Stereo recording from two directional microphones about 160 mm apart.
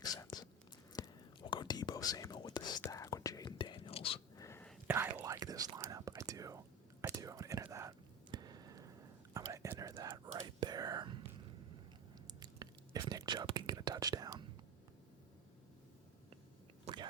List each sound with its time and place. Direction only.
0.0 s whispering: 25° left (ahead or behind)
4.4 s whispering: 20° left (ahead or behind)
4.9 s whispering: 10° right (ahead or behind); by 11.3 s 30° right (ahead or behind)
12.3 s whispering: 25° right (ahead or behind)
16.9 s whispering: 40° right (ahead or behind)